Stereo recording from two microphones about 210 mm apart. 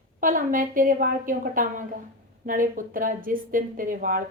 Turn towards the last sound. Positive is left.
turn(degrees=-40)  # may be behind; listen again after turning